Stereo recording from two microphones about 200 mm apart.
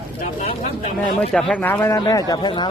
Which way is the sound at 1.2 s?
5° left (ahead or behind).